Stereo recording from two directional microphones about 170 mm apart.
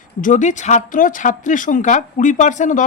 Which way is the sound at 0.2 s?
50° left (ahead or behind).